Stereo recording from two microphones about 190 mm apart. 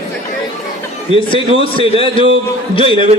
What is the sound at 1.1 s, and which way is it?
A man's voice, 25° left (ahead or behind).